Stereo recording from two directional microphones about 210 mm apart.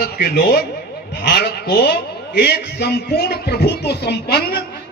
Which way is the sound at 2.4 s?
50° left (ahead or behind).